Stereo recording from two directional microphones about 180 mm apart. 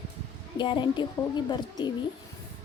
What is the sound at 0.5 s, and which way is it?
A woman's voice, 25° left (ahead or behind).